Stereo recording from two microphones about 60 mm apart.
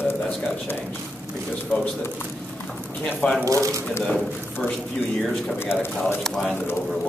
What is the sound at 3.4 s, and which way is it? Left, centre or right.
Speech, right.